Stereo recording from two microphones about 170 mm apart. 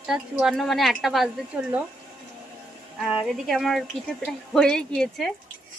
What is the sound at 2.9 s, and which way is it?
A woman's voice, centre (ahead or behind).